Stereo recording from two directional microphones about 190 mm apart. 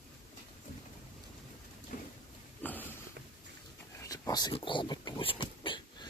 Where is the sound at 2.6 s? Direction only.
10° left (ahead or behind).